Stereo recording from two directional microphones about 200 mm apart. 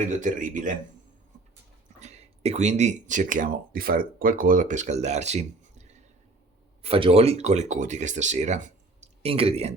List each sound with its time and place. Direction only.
0.0 s speech: 40° right (ahead or behind)
2.0 s speech: 35° right (ahead or behind)